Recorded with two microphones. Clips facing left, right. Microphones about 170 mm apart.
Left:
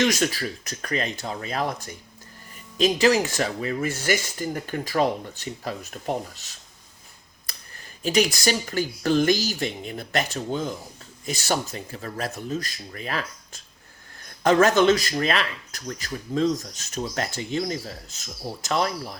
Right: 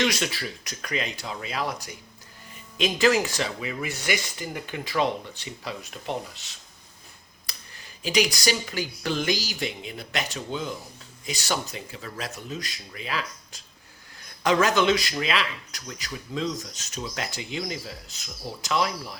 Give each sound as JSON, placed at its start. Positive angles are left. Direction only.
{"t": 0.0, "sound": "speech", "side_deg": 45}
{"t": 2.7, "sound": "speech", "side_deg": 35}
{"t": 8.0, "sound": "speech", "side_deg": 45}